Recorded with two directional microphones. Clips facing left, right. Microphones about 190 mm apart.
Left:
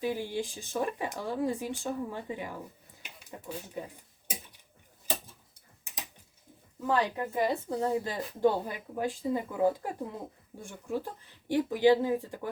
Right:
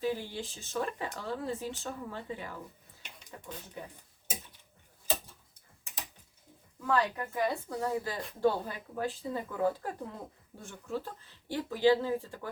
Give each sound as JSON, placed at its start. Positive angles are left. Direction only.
{"t": 0.0, "sound": "speech", "side_deg": 15}
{"t": 6.8, "sound": "speech", "side_deg": 25}